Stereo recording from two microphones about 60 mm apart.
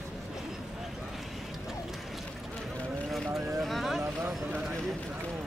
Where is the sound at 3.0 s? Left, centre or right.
Centre.